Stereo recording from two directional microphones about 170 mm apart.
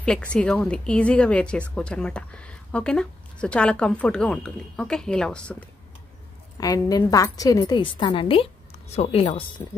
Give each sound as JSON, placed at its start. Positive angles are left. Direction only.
{"t": 0.0, "sound": "speech", "side_deg": 5}
{"t": 6.6, "sound": "a woman's voice", "side_deg": 20}